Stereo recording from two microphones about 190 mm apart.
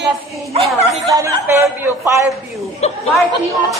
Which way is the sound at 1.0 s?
15° right (ahead or behind).